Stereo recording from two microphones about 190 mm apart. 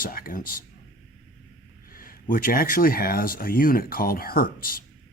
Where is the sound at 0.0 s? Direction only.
50° left (ahead or behind).